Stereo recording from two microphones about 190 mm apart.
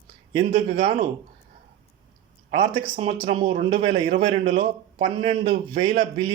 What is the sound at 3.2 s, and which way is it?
Speech, 25° right (ahead or behind).